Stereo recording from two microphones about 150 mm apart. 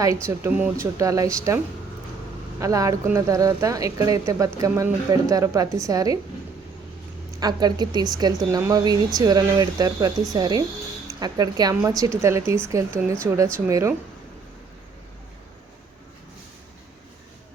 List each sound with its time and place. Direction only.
0.0 s speech: 20° right (ahead or behind)
2.6 s speech: 20° right (ahead or behind)
7.3 s speech: 25° right (ahead or behind)